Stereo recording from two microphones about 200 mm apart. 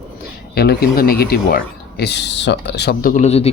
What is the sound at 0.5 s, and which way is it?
Speech, 55° left (ahead or behind).